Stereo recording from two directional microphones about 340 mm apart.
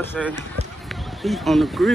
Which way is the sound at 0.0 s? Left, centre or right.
Centre.